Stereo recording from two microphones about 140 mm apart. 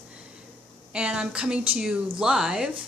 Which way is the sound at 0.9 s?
5° right (ahead or behind).